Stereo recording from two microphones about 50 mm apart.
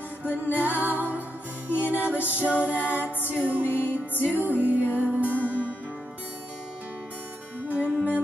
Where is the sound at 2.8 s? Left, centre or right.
Right.